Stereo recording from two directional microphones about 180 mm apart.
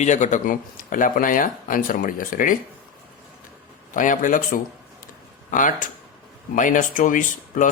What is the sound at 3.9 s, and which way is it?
A man's voice, 45° left (ahead or behind).